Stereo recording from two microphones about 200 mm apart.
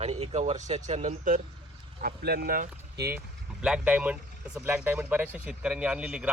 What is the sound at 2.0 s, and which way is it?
Speech, 50° right (ahead or behind).